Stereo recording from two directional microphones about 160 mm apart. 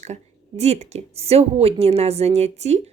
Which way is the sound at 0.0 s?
45° right (ahead or behind).